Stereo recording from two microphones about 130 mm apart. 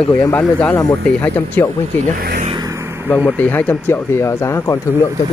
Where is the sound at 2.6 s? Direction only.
20° right (ahead or behind).